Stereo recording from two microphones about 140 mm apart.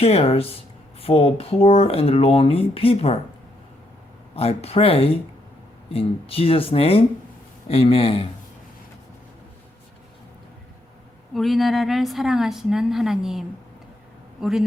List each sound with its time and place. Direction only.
0.0 s speech: 45° left (ahead or behind)
4.4 s speech: 45° left (ahead or behind)
11.3 s a woman's voice: centre (ahead or behind)
14.4 s a woman's voice: centre (ahead or behind)